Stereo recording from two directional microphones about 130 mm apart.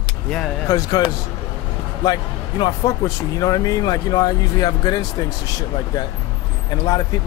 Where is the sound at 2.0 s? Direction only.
35° left (ahead or behind).